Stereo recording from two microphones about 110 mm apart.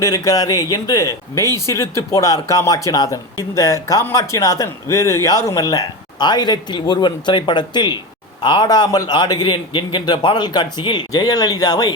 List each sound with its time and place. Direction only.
0.0 s speech: 35° left (ahead or behind)